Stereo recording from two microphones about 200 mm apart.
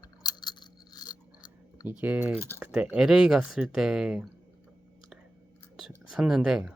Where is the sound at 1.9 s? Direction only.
10° right (ahead or behind).